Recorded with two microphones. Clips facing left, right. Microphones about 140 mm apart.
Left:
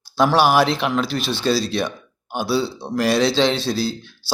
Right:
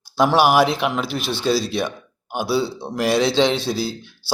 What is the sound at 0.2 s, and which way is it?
Speech, 15° right (ahead or behind).